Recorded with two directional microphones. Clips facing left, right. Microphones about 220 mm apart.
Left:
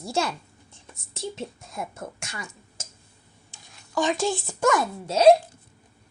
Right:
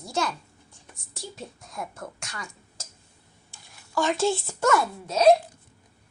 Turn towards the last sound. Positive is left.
turn(degrees=30)  # may be behind; listen again after turning